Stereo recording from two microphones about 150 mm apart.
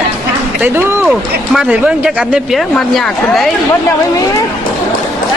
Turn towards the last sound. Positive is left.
turn(degrees=0)  # may be behind; listen again after turning